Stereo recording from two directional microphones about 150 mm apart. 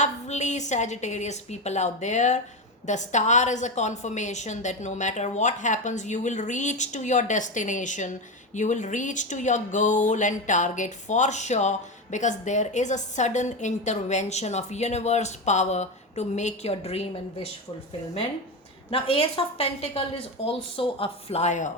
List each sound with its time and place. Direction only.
0.0 s a woman's voice: 50° left (ahead or behind)
18.9 s speech: 40° left (ahead or behind)